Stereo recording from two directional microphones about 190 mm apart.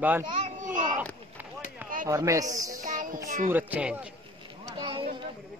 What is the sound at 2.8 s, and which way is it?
Music, 45° right (ahead or behind).